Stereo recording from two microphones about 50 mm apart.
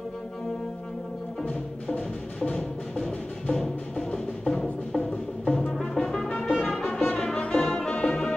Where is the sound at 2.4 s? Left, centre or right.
Left.